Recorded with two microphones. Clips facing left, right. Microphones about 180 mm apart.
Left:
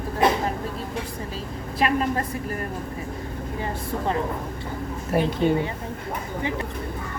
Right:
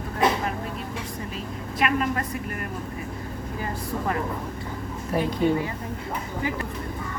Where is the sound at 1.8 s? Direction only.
35° left (ahead or behind).